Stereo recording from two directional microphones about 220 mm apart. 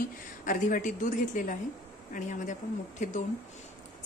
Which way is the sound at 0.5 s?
35° left (ahead or behind).